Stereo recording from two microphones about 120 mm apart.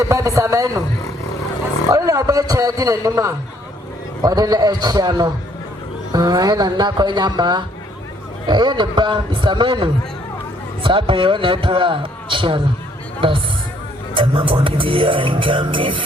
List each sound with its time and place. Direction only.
0.0 s a man's voice: 25° right (ahead or behind)
1.9 s a man's voice: 30° right (ahead or behind)
10.8 s a sound: 45° right (ahead or behind)